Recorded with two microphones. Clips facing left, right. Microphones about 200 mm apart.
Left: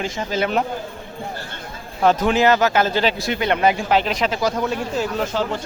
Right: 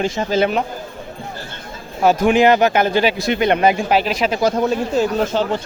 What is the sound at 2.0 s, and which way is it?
Speech, 10° right (ahead or behind).